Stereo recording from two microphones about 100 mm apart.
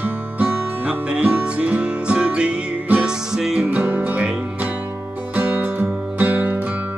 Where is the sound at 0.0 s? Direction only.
15° right (ahead or behind).